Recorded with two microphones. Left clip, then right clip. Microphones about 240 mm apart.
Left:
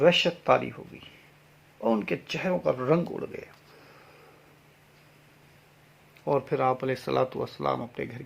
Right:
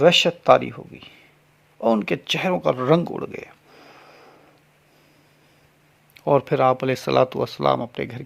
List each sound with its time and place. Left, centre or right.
0.0 s speech: right
6.2 s speech: right